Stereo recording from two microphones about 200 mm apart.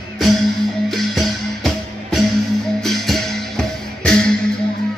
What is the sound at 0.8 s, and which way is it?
Music, centre (ahead or behind).